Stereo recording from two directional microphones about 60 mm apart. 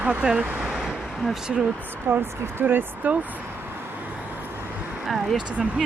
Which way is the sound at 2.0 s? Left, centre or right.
Right.